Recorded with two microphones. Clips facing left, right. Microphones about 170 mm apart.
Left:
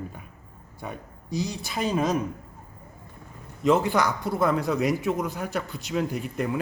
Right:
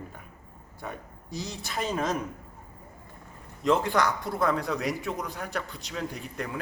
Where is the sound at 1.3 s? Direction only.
Centre (ahead or behind).